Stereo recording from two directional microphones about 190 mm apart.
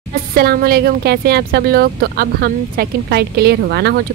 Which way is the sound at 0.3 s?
55° right (ahead or behind).